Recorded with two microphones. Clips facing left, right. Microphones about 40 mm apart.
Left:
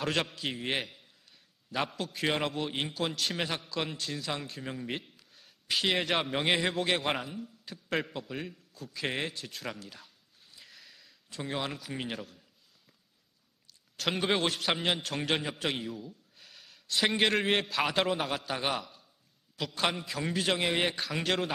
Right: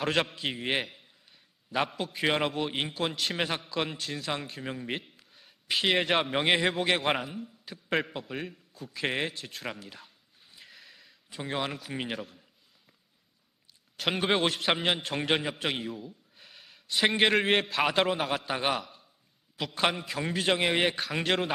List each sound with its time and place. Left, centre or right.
0.0 s a man's voice: centre
10.5 s a sound: centre
13.9 s a man's voice: centre
20.6 s a man's voice: centre